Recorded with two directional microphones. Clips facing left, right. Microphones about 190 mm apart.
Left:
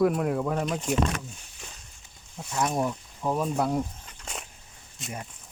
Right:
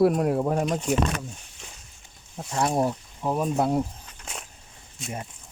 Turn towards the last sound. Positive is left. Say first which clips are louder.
# right 3 dB
turn(degrees=0)  # may be behind; listen again after turning